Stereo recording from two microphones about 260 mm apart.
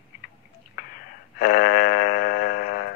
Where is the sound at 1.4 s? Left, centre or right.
Left.